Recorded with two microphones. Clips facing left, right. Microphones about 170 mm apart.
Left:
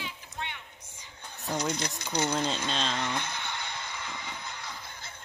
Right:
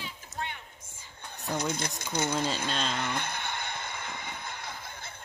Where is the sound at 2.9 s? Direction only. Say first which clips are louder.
Even; 55° right (ahead or behind).